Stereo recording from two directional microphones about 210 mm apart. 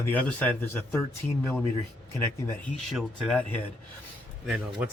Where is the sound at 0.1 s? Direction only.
5° left (ahead or behind).